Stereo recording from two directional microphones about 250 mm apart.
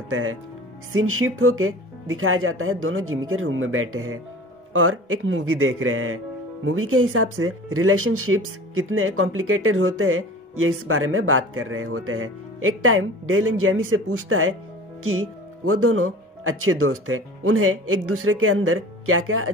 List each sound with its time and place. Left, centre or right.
0.1 s speech: right
15.6 s speech: right